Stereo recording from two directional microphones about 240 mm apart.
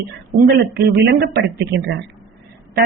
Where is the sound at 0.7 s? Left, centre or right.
Right.